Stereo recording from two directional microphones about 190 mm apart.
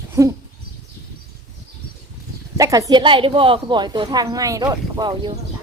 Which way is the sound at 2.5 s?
20° right (ahead or behind).